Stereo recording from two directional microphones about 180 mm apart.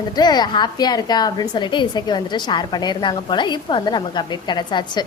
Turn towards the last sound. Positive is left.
turn(degrees=25)  # may be behind; listen again after turning